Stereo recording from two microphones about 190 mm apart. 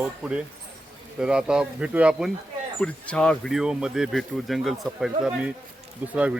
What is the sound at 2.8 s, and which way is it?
Speech, 5° left (ahead or behind).